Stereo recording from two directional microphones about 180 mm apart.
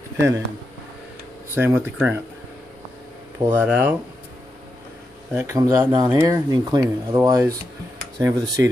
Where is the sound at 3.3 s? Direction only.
15° right (ahead or behind).